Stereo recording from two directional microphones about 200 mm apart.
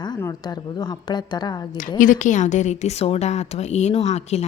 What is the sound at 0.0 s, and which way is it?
Speech, 20° left (ahead or behind).